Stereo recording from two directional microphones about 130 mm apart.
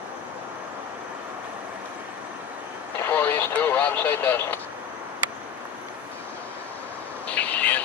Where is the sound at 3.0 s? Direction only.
15° left (ahead or behind).